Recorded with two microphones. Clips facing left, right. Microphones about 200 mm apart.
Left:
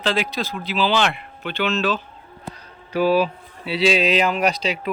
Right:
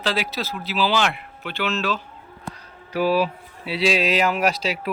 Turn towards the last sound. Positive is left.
turn(degrees=-5)  # may be behind; listen again after turning